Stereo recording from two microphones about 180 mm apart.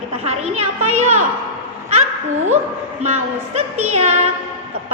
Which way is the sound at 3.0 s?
40° right (ahead or behind).